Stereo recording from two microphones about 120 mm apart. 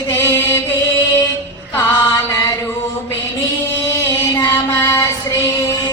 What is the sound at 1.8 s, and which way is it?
Chant, 25° left (ahead or behind).